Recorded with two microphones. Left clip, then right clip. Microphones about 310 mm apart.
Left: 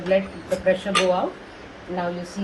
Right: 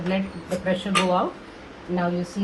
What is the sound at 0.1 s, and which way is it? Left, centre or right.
Speech, centre.